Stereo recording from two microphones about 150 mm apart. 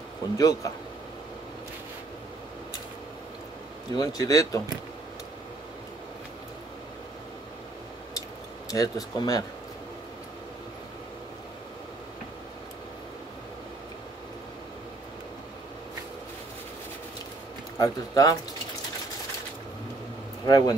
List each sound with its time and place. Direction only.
0.4 s speech: 25° left (ahead or behind)
3.9 s speech: 25° left (ahead or behind)
8.6 s speech: 25° left (ahead or behind)
17.7 s speech: 25° left (ahead or behind)
20.4 s speech: 25° left (ahead or behind)